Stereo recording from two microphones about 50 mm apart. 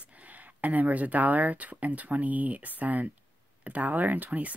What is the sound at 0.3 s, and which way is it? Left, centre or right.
Speech, right.